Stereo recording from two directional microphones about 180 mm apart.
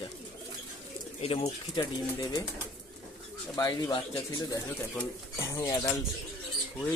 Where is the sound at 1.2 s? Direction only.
35° left (ahead or behind).